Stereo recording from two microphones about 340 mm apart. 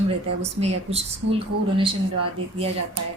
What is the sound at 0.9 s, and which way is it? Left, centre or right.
A woman's voice, centre.